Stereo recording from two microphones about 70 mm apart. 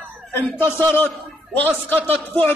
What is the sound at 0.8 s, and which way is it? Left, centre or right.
A man's voice, left.